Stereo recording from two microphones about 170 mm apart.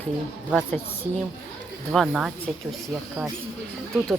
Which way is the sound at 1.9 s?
Centre (ahead or behind).